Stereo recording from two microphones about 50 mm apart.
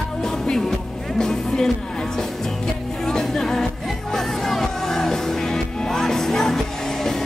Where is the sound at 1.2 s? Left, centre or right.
Centre.